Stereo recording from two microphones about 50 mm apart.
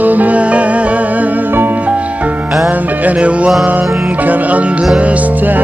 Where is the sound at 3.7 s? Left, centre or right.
Right.